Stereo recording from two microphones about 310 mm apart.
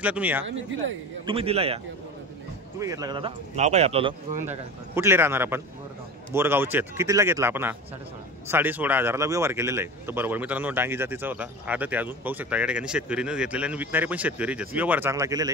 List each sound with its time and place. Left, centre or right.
0.0 s speech: centre
0.5 s speech: right
1.2 s speech: centre
2.8 s speech: centre
4.9 s speech: centre